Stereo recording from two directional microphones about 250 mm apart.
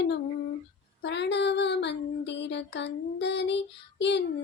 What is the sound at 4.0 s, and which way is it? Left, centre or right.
Music, left.